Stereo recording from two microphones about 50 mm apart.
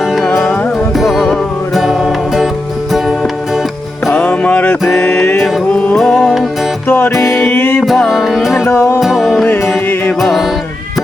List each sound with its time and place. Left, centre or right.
0.0 s music: centre
4.1 s music: left
4.9 s music: centre
6.8 s music: left
7.9 s music: centre
9.9 s music: left
10.2 s music: centre